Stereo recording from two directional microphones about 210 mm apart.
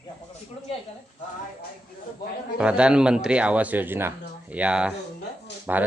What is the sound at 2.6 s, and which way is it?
Speech, 5° right (ahead or behind).